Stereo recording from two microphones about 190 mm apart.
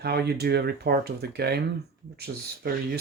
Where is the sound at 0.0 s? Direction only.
60° right (ahead or behind).